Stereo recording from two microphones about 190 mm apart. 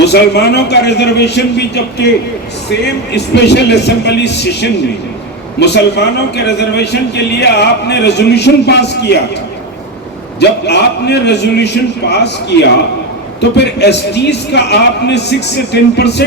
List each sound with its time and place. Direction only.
0.0 s a man's voice: 60° left (ahead or behind)
10.7 s a man's voice: 60° left (ahead or behind)